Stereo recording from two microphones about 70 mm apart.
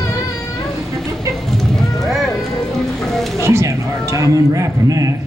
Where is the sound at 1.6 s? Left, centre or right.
Centre.